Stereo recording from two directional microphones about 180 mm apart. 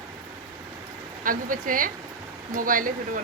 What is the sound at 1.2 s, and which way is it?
A woman's voice, 50° right (ahead or behind).